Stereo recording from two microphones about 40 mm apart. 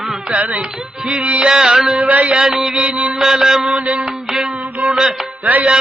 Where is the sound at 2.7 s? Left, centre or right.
Right.